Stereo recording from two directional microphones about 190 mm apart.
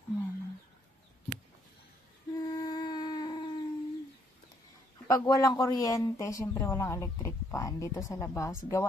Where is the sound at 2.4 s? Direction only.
20° left (ahead or behind).